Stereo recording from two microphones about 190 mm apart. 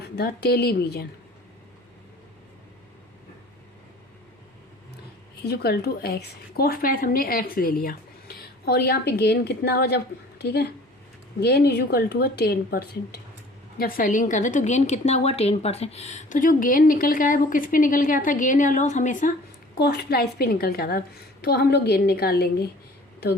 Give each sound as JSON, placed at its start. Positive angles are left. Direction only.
{"t": 0.0, "sound": "a woman's voice", "side_deg": 60}
{"t": 5.4, "sound": "a woman's voice", "side_deg": 60}
{"t": 19.7, "sound": "a woman's voice", "side_deg": 60}